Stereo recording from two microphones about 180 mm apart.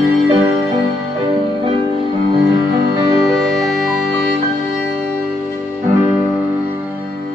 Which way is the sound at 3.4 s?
Centre (ahead or behind).